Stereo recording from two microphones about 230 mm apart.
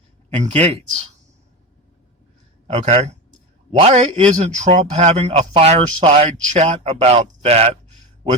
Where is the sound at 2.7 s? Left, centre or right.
Right.